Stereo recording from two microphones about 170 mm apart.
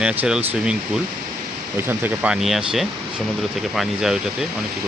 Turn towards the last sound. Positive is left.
turn(degrees=0)  # may be behind; listen again after turning